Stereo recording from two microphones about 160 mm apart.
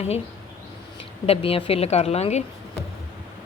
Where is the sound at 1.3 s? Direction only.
35° left (ahead or behind).